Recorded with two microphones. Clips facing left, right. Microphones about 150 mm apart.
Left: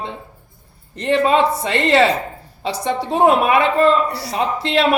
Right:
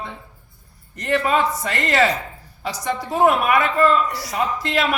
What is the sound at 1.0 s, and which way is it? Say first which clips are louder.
A man's voice: left 4 dB; 25° left (ahead or behind).